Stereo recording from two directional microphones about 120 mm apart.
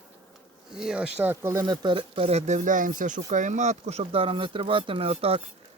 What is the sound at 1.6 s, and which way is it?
Speech, 40° right (ahead or behind).